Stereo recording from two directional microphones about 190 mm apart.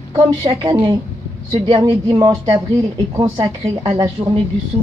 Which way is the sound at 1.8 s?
20° right (ahead or behind).